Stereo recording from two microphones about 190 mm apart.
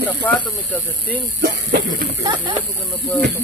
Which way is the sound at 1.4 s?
65° right (ahead or behind).